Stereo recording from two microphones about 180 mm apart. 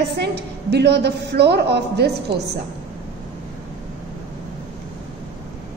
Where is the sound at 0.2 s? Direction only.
65° right (ahead or behind).